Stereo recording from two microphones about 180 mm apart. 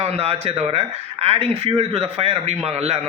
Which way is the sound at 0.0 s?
35° right (ahead or behind).